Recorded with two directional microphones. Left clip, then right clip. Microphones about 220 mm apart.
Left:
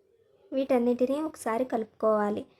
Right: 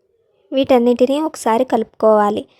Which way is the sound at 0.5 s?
40° right (ahead or behind).